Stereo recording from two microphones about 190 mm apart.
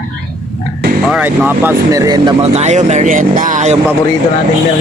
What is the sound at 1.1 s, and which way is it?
Speech, 10° right (ahead or behind).